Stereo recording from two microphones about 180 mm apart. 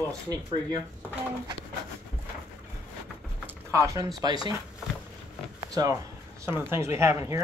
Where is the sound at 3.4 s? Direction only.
15° right (ahead or behind).